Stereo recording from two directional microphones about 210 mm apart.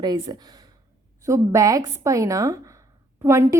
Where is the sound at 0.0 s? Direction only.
20° right (ahead or behind).